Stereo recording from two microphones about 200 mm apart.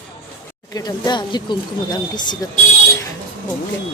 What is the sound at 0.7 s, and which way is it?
Speech, 20° left (ahead or behind).